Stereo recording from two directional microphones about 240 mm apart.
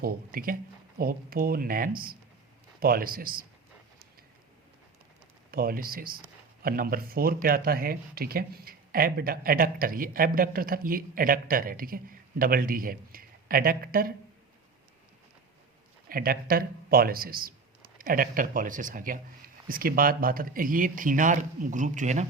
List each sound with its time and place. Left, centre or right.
0.0 s speech: right
5.5 s a man's voice: right
16.0 s speech: right